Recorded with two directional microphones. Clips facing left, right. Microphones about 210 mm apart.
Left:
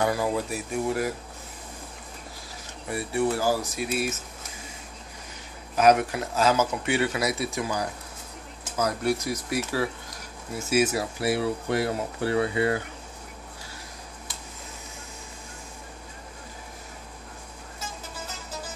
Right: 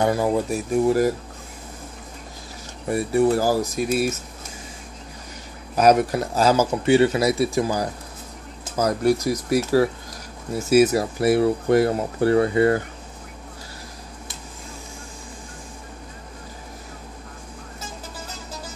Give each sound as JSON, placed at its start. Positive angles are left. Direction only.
{"t": 0.0, "sound": "speech", "side_deg": -25}
{"t": 0.8, "sound": "speech", "side_deg": -40}
{"t": 2.9, "sound": "speech", "side_deg": -40}
{"t": 5.8, "sound": "speech", "side_deg": -40}